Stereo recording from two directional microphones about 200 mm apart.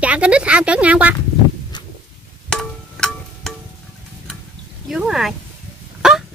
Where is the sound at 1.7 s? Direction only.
20° left (ahead or behind).